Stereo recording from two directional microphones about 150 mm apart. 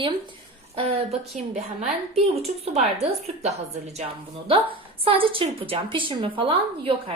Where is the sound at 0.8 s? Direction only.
40° right (ahead or behind).